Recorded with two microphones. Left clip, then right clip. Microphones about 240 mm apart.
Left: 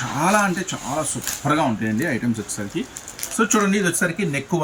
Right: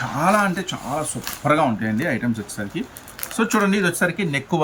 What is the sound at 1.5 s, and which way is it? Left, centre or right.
Speech, centre.